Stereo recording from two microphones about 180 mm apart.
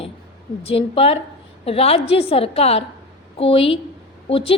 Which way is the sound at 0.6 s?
30° left (ahead or behind).